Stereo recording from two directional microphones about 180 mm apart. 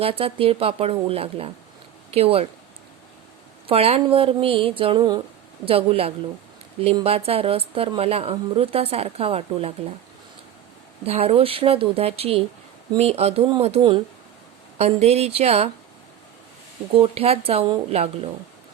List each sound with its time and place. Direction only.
0.0 s a woman's voice: 30° right (ahead or behind)
3.7 s a woman's voice: 35° right (ahead or behind)
4.8 s a sound: 30° right (ahead or behind)
5.6 s a woman's voice: 30° right (ahead or behind)
11.0 s a woman's voice: 35° right (ahead or behind)
16.9 s a woman's voice: 35° right (ahead or behind)